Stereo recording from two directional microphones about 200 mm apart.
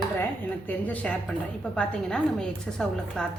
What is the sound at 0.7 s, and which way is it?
A woman's voice, 10° left (ahead or behind).